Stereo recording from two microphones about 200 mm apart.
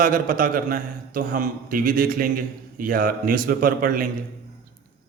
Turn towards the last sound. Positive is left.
turn(degrees=-45)  # may be behind; listen again after turning